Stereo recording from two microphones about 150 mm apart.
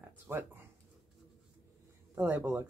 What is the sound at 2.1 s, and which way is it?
Speech, 10° right (ahead or behind).